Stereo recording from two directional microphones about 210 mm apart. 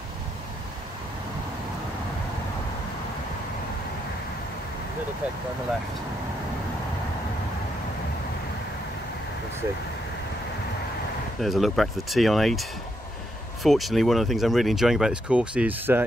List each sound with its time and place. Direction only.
11.4 s speech: centre (ahead or behind)